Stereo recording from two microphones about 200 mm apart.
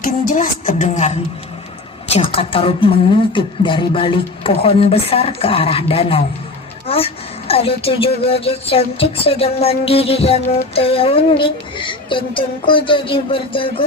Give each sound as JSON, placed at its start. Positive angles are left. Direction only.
{"t": 0.0, "sound": "music", "side_deg": 40}
{"t": 6.8, "sound": "speech", "side_deg": 30}
{"t": 8.3, "sound": "music", "side_deg": 30}